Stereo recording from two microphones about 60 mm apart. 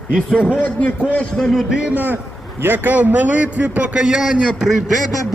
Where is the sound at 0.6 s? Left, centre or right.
Left.